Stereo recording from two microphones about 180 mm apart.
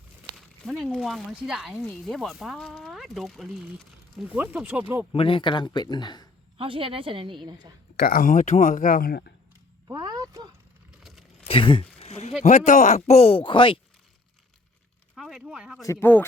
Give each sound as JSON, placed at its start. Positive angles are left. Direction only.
{"t": 0.3, "sound": "speech", "side_deg": 0}
{"t": 5.1, "sound": "speech", "side_deg": 30}
{"t": 6.6, "sound": "a woman's voice", "side_deg": -30}
{"t": 7.9, "sound": "speech", "side_deg": 55}
{"t": 9.9, "sound": "a sound", "side_deg": -20}
{"t": 11.0, "sound": "a sound", "side_deg": 0}
{"t": 11.4, "sound": "a sound", "side_deg": 30}
{"t": 12.4, "sound": "speech", "side_deg": 40}
{"t": 15.1, "sound": "speech", "side_deg": -5}
{"t": 15.9, "sound": "speech", "side_deg": 10}